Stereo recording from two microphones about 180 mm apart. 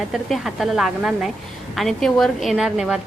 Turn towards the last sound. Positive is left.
turn(degrees=-5)  # may be behind; listen again after turning